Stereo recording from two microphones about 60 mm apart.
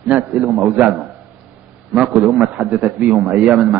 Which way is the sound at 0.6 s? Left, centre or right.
Right.